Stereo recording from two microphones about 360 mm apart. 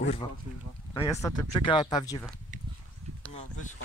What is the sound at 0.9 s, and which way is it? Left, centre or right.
Speech, centre.